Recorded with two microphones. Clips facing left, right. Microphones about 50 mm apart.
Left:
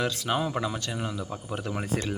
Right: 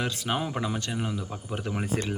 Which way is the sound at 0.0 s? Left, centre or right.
Centre.